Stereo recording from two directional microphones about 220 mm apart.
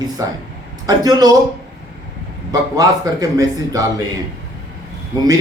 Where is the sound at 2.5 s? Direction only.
15° right (ahead or behind).